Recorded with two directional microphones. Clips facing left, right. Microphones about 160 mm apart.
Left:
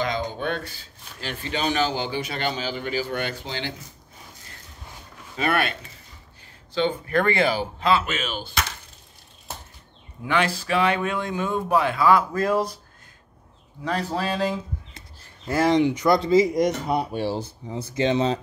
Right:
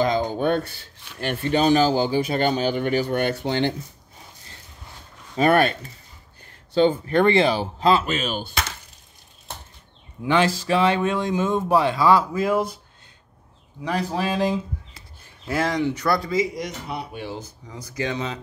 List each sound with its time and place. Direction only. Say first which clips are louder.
0.0 s a sound: right 5 dB; 45° right (ahead or behind)
1.2 s a man's voice: right 8 dB; 55° right (ahead or behind)
1.6 s a man's voice: right 6 dB; 35° right (ahead or behind); by 3.7 s 55° right (ahead or behind)
5.3 s a man's voice: right 6 dB; 40° right (ahead or behind)
7.1 s speech: right 4 dB; 25° right (ahead or behind)
10.2 s speech: right 4 dB; 30° right (ahead or behind)
12.4 s speech: right 1 dB; 5° right (ahead or behind)
13.8 s speech: right 1 dB; 15° right (ahead or behind)
15.6 s speech: left 5 dB; 20° left (ahead or behind)
16.2 s speech: left 6 dB; 25° left (ahead or behind)
16.5 s speech: left 9 dB; 45° left (ahead or behind); by 18.4 s 30° left (ahead or behind)